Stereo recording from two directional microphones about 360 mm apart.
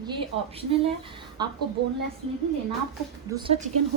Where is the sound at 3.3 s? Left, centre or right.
Centre.